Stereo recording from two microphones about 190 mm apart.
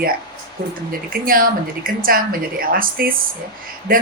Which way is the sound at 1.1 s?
50° right (ahead or behind).